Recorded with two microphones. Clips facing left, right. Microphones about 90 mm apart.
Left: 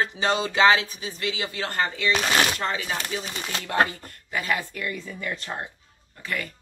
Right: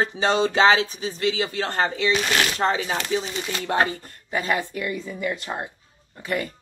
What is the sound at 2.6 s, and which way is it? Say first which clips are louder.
Speech: right 6 dB; 45° right (ahead or behind).